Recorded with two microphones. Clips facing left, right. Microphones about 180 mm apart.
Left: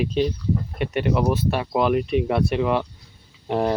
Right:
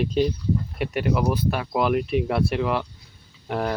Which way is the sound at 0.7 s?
Centre (ahead or behind).